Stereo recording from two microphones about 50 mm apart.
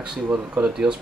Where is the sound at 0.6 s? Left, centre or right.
Centre.